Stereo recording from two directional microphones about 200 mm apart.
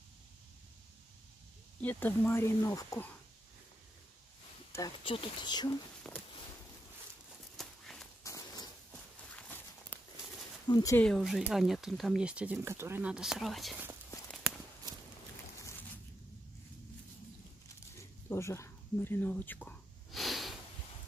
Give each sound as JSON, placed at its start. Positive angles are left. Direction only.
{"t": 1.8, "sound": "speech", "side_deg": 10}
{"t": 4.7, "sound": "speech", "side_deg": 20}
{"t": 6.0, "sound": "speech", "side_deg": 5}
{"t": 7.5, "sound": "a sound", "side_deg": 0}
{"t": 8.2, "sound": "a sound", "side_deg": 15}
{"t": 9.3, "sound": "walk", "side_deg": 10}
{"t": 10.7, "sound": "speech", "side_deg": 15}
{"t": 11.1, "sound": "speech", "side_deg": 0}
{"t": 17.9, "sound": "a sound", "side_deg": 15}